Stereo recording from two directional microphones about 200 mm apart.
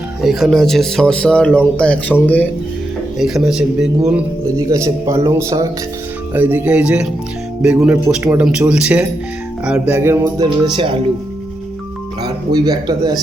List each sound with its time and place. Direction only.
0.2 s speech: centre (ahead or behind)
4.7 s speech: 15° right (ahead or behind)
12.2 s speech: 20° right (ahead or behind)